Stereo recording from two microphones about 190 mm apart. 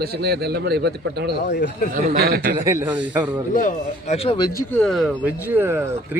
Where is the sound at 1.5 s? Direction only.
65° left (ahead or behind).